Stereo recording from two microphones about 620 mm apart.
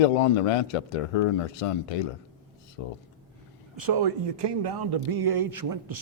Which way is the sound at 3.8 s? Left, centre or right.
Right.